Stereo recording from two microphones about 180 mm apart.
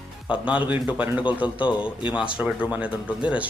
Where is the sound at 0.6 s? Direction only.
10° right (ahead or behind).